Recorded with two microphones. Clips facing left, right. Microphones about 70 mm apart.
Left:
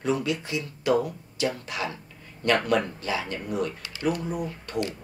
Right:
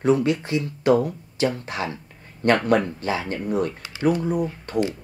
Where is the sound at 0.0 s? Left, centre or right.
Right.